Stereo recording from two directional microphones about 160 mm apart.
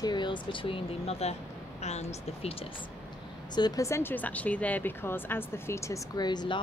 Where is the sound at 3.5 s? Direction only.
25° left (ahead or behind).